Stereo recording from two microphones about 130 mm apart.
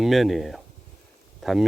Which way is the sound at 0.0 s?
Centre (ahead or behind).